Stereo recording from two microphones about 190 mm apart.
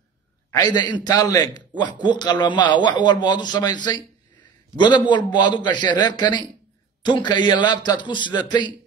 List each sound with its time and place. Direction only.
0.5 s speech: 20° left (ahead or behind)